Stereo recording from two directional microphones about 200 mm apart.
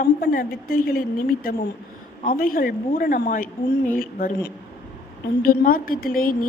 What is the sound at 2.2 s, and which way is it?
A woman's voice, 45° left (ahead or behind).